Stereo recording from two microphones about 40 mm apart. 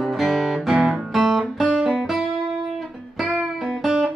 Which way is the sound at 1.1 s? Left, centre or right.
Centre.